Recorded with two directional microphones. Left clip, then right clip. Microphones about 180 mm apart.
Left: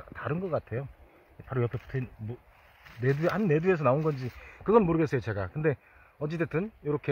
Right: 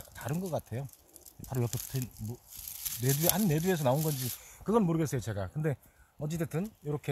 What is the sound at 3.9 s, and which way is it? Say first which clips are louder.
Speech: left 4 dB; 40° left (ahead or behind).